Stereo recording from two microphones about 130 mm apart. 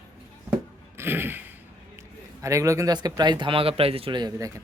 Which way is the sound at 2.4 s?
25° right (ahead or behind).